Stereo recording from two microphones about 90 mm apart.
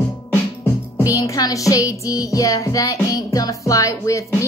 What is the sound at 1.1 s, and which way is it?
Speech, 40° left (ahead or behind).